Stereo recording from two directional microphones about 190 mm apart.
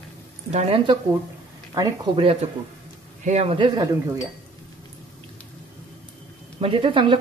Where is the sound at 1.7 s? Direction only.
20° right (ahead or behind).